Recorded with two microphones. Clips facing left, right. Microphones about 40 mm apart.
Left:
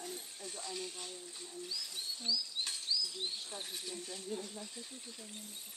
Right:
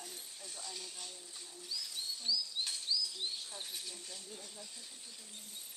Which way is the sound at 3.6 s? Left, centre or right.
Centre.